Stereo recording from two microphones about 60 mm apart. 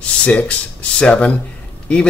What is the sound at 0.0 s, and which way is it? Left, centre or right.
Speech, centre.